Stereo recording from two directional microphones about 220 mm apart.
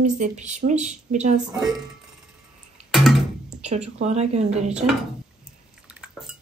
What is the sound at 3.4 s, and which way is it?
Music, 30° right (ahead or behind).